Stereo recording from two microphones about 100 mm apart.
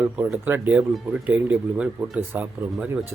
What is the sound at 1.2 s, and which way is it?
Speech, 15° right (ahead or behind).